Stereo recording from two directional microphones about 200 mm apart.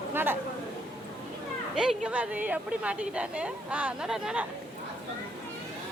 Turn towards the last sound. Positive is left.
turn(degrees=-5)  # may be behind; listen again after turning